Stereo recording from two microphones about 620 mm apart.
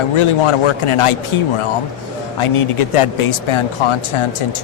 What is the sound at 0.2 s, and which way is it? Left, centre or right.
Speech, left.